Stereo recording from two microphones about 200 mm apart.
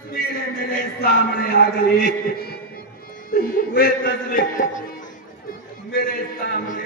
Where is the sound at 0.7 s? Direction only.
50° left (ahead or behind).